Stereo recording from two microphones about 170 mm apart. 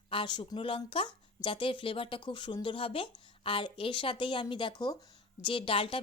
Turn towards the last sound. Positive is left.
turn(degrees=30)  # may be behind; listen again after turning